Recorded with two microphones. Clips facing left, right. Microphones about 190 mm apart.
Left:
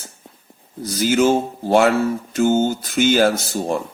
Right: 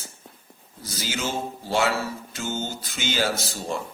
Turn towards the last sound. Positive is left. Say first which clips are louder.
# left 8 dB
turn(degrees=55)  # may be behind; listen again after turning